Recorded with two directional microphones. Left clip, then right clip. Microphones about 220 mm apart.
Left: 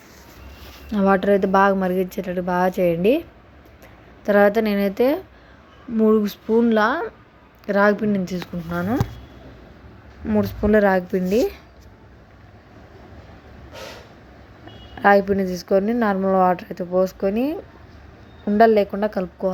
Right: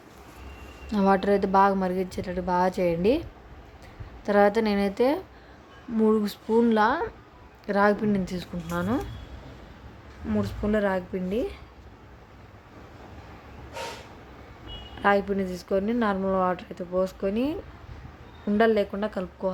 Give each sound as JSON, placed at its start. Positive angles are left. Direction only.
{"t": 0.9, "sound": "a woman's voice", "side_deg": 5}
{"t": 10.2, "sound": "speech", "side_deg": 15}
{"t": 15.0, "sound": "a woman's voice", "side_deg": 15}